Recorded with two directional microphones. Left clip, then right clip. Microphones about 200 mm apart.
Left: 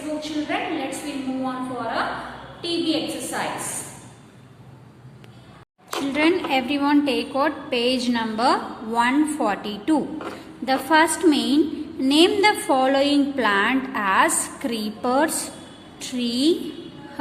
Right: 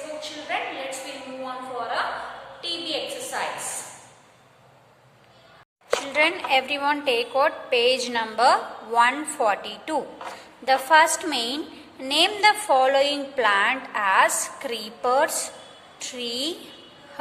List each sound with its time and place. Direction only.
0.2 s a sound: centre (ahead or behind)
1.5 s a woman's voice: centre (ahead or behind)
6.1 s a woman's voice: 5° right (ahead or behind)